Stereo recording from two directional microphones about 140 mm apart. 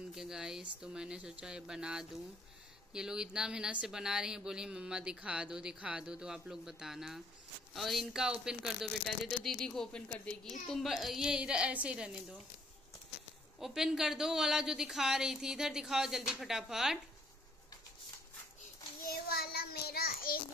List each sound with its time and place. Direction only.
0.1 s speech: 5° right (ahead or behind)
13.6 s speech: centre (ahead or behind)
19.0 s child singing: 90° left